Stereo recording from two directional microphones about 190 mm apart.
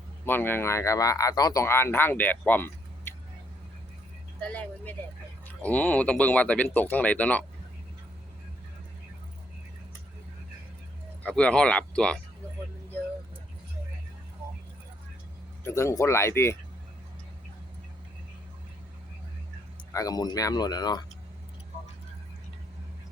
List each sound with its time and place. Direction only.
0.3 s speech: 10° left (ahead or behind)
4.4 s speech: 5° left (ahead or behind)
11.2 s speech: 5° left (ahead or behind)
15.6 s speech: 15° left (ahead or behind)
19.9 s speech: 20° left (ahead or behind)